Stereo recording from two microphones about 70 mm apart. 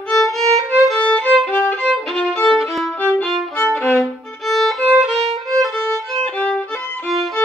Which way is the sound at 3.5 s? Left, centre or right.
Left.